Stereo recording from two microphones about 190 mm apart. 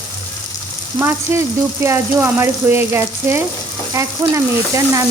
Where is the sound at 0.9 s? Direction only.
15° right (ahead or behind).